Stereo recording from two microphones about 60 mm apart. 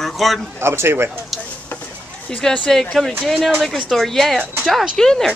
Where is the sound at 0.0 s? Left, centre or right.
Centre.